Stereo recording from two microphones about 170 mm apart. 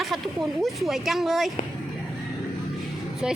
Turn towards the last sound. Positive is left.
turn(degrees=-5)  # may be behind; listen again after turning